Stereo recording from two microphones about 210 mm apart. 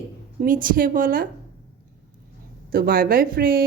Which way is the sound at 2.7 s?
45° right (ahead or behind).